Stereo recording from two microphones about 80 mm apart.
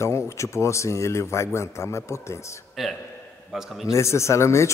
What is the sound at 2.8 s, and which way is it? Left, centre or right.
A man's voice, centre.